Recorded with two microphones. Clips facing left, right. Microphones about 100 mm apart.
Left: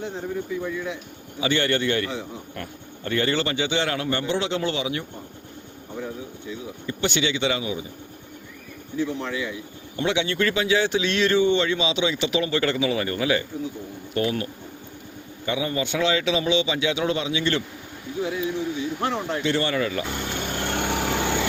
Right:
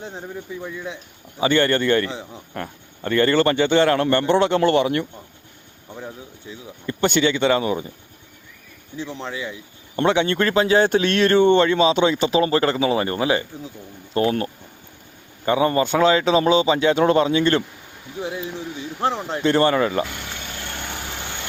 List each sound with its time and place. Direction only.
1.4 s a man's voice: 45° right (ahead or behind)
6.8 s speech: 50° right (ahead or behind)
9.0 s speech: 25° right (ahead or behind)
9.9 s speech: 45° right (ahead or behind)
19.0 s speech: 30° right (ahead or behind)
19.5 s speech: 45° right (ahead or behind)
20.1 s vehicle: 45° left (ahead or behind)
20.8 s vehicle: 75° left (ahead or behind); by 21.4 s 90° left